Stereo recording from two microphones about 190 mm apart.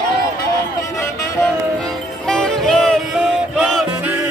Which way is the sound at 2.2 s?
5° left (ahead or behind).